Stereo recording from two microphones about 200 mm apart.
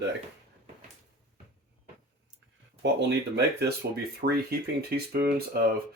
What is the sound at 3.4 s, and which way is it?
Speech, 55° right (ahead or behind).